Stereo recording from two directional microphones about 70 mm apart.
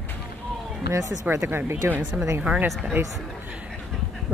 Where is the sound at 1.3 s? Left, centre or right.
Right.